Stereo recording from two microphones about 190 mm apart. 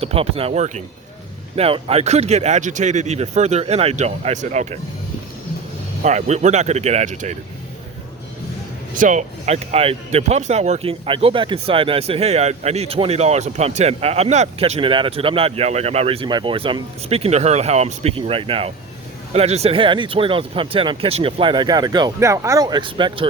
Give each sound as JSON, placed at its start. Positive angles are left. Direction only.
{"t": 0.0, "sound": "speech", "side_deg": -30}
{"t": 6.0, "sound": "speech", "side_deg": -40}
{"t": 9.0, "sound": "speech", "side_deg": -40}